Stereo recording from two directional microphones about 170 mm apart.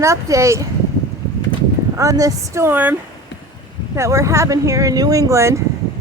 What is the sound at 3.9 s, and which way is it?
Speech, 15° right (ahead or behind).